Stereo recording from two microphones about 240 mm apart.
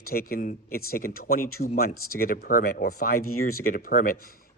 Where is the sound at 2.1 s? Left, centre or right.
Left.